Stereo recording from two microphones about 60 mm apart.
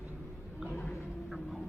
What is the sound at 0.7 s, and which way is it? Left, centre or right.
Bird, left.